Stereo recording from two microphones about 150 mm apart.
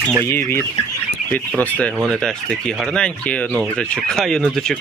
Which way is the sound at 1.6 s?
10° left (ahead or behind).